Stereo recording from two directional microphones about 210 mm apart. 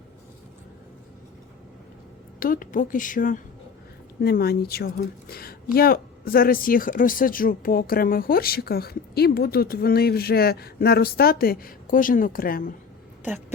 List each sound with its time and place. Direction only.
2.4 s a woman's voice: 40° left (ahead or behind)